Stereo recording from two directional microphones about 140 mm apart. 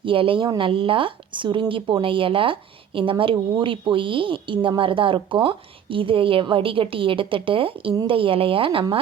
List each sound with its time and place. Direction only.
0.0 s speech: 40° right (ahead or behind)